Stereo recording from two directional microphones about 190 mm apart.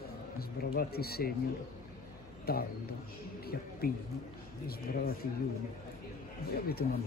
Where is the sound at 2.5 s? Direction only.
55° left (ahead or behind).